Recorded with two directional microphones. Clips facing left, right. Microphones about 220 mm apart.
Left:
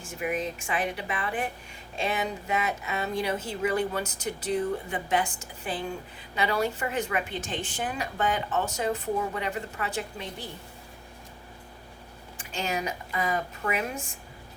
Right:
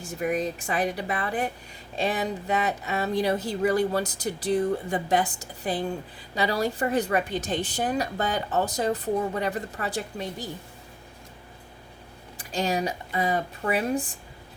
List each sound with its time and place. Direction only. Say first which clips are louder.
0.0 s a woman's voice: right 4 dB; 35° right (ahead or behind)
12.4 s a woman's voice: right 5 dB; 35° right (ahead or behind)